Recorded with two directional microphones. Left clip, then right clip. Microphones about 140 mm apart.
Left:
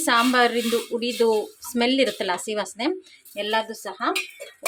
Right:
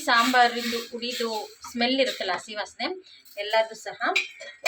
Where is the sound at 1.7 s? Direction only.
85° left.